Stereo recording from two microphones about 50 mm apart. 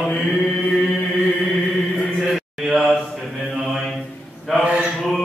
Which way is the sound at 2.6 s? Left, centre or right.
Centre.